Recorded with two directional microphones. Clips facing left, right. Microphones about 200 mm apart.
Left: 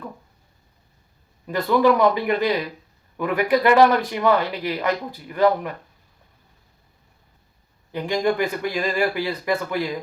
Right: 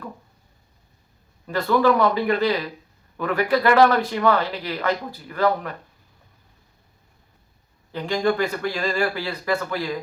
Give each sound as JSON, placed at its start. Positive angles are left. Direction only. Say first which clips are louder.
{"t": 1.5, "sound": "a man's voice", "louder": "left 1 dB", "side_deg": 15}
{"t": 7.9, "sound": "a man's voice", "louder": "even", "side_deg": 15}